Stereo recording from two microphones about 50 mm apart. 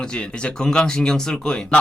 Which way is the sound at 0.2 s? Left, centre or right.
Centre.